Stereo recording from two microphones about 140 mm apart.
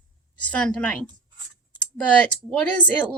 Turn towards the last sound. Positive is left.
turn(degrees=10)  # may be behind; listen again after turning